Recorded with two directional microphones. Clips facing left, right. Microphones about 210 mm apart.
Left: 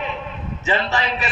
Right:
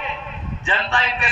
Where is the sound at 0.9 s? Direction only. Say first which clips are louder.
Left 2 dB; 40° left (ahead or behind).